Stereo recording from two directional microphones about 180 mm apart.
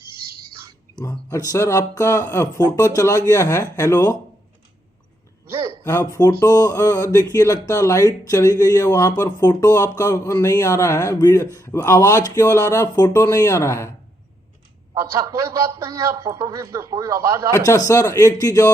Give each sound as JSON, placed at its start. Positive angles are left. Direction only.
{"t": 0.0, "sound": "a sound", "side_deg": 30}
{"t": 0.9, "sound": "speech", "side_deg": 20}
{"t": 5.5, "sound": "a sound", "side_deg": -15}
{"t": 5.8, "sound": "speech", "side_deg": 20}
{"t": 14.9, "sound": "a man's voice", "side_deg": -15}
{"t": 17.5, "sound": "speech", "side_deg": 15}